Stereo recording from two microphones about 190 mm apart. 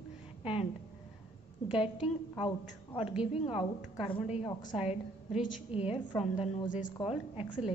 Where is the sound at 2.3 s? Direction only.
25° left (ahead or behind).